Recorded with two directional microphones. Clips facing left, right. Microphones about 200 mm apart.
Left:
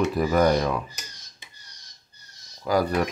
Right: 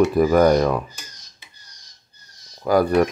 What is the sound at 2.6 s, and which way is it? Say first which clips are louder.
Speech: right 6 dB; 55° right (ahead or behind).